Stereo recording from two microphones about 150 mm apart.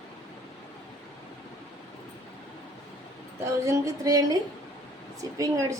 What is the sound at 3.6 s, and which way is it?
A woman's voice, 20° right (ahead or behind).